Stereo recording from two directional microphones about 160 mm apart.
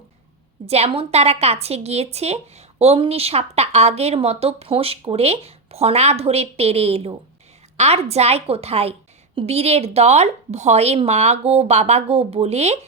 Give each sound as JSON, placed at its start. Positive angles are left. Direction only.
{"t": 0.6, "sound": "a woman's voice", "side_deg": -40}